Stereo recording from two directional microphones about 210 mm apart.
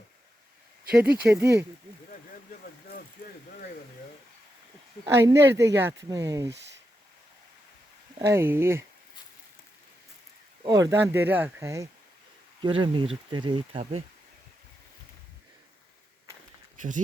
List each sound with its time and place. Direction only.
0.9 s speech: 5° right (ahead or behind)
5.0 s speech: 15° right (ahead or behind)
8.2 s speech: 10° right (ahead or behind)
10.6 s speech: 15° right (ahead or behind)